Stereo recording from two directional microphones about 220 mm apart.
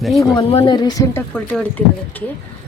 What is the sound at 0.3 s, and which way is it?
Speech, 25° left (ahead or behind).